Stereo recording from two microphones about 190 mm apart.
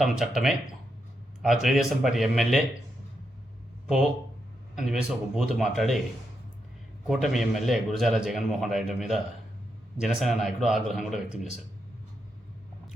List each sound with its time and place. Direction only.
0.0 s speech: centre (ahead or behind)
4.7 s speech: centre (ahead or behind)
7.1 s speech: centre (ahead or behind)